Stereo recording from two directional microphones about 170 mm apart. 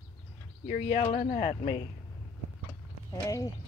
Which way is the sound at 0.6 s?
40° left (ahead or behind).